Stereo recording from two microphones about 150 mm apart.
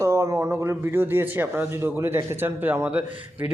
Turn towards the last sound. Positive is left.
turn(degrees=-10)  # may be behind; listen again after turning